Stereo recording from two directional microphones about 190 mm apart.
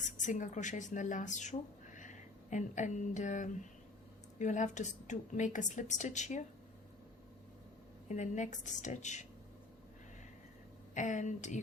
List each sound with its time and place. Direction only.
0.2 s a woman's voice: 40° left (ahead or behind)
8.0 s a woman's voice: 40° left (ahead or behind)
10.9 s a woman's voice: 40° left (ahead or behind)